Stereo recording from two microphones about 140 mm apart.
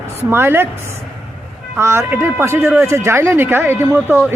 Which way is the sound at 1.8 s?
20° right (ahead or behind).